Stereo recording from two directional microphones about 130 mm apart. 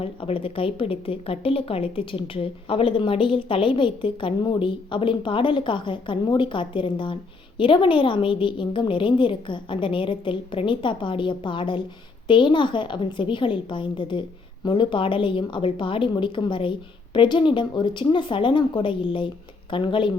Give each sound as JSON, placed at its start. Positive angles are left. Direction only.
{"t": 0.0, "sound": "speech", "side_deg": 45}